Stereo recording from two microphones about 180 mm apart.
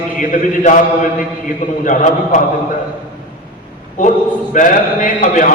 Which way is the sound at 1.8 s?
45° left (ahead or behind).